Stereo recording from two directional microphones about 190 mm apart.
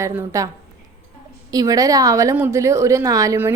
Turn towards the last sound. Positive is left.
turn(degrees=-15)  # may be behind; listen again after turning